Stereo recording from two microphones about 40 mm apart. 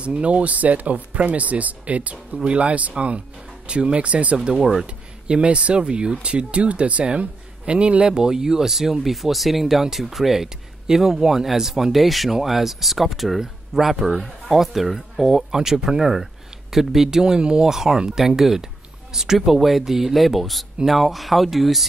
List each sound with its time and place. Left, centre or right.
0.0 s speech: right
4.5 s speech: right
7.1 s speech: right
8.1 s speech: centre